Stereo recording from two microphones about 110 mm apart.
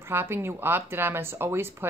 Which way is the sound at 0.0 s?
20° right (ahead or behind).